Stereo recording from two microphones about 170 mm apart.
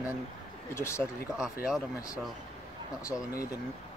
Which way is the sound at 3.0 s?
20° left (ahead or behind).